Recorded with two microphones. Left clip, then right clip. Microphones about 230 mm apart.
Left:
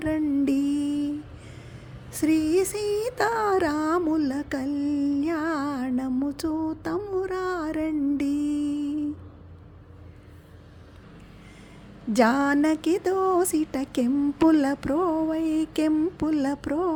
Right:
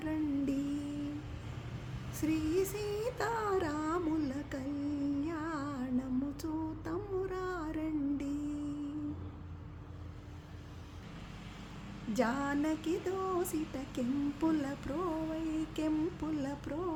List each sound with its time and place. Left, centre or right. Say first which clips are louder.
0.0 s music: left 11 dB; left
2.1 s a sound: left 11 dB; left
12.1 s mantra: left 12 dB; left